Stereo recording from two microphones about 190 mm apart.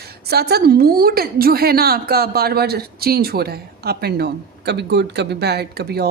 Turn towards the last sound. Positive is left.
turn(degrees=-55)  # may be behind; listen again after turning